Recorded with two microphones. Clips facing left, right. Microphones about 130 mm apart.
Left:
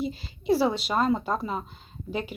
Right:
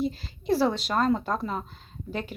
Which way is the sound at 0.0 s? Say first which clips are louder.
Right 1 dB; centre (ahead or behind).